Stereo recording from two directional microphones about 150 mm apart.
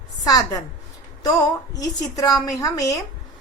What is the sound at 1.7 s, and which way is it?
Speech, 25° left (ahead or behind).